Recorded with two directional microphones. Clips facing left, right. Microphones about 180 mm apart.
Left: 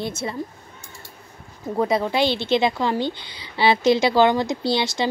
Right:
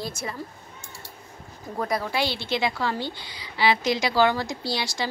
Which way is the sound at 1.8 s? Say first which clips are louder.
Left 6 dB; 20° left (ahead or behind).